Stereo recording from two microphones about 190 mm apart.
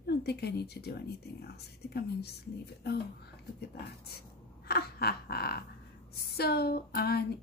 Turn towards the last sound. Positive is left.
turn(degrees=55)  # may be behind; listen again after turning